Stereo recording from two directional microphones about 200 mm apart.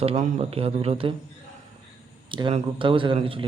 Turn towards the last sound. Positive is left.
turn(degrees=-25)  # may be behind; listen again after turning